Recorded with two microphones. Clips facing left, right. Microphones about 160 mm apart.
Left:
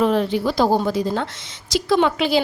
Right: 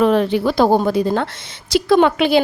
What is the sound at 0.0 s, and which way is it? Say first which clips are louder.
A woman's voice: right 4 dB; 65° right (ahead or behind).